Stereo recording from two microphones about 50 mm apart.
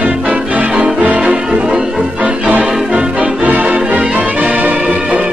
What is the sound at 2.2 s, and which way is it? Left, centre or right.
Music, right.